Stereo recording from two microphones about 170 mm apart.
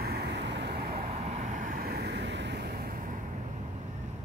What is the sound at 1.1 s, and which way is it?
Vehicle, 40° right (ahead or behind).